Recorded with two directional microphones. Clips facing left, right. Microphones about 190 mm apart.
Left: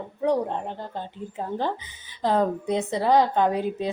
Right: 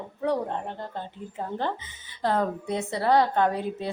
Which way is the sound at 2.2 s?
15° left (ahead or behind).